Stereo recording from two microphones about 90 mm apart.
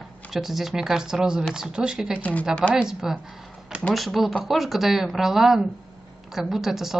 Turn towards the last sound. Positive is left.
turn(degrees=-5)  # may be behind; listen again after turning